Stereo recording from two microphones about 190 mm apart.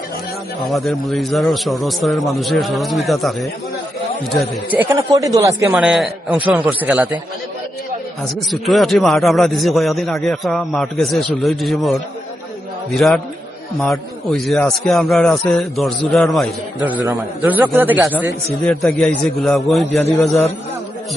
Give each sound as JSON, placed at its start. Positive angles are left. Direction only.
{"t": 0.6, "sound": "a man's voice", "side_deg": 0}
{"t": 4.8, "sound": "a man's voice", "side_deg": -15}
{"t": 5.7, "sound": "a man's voice", "side_deg": 0}
{"t": 8.4, "sound": "a man's voice", "side_deg": 0}
{"t": 18.6, "sound": "a man's voice", "side_deg": 5}